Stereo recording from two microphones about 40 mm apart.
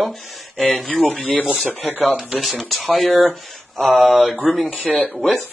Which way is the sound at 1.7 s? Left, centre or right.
Right.